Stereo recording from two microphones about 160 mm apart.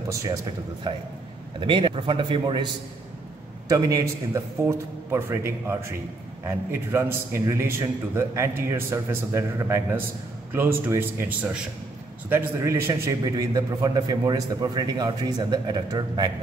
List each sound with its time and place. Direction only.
0.1 s a man's voice: 20° right (ahead or behind)